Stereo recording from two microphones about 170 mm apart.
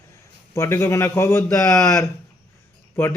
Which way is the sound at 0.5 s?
15° left (ahead or behind).